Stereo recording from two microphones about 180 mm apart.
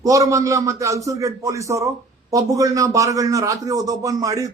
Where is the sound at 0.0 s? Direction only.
20° right (ahead or behind).